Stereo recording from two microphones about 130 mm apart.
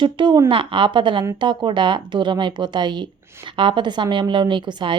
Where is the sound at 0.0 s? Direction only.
40° right (ahead or behind).